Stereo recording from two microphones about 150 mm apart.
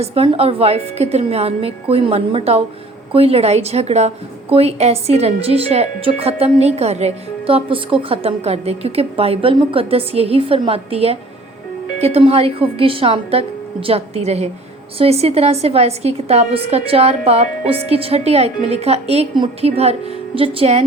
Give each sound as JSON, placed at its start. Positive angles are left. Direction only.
{"t": 0.0, "sound": "a woman's voice", "side_deg": -40}